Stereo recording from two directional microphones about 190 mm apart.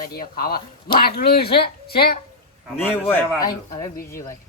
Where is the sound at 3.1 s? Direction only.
10° left (ahead or behind).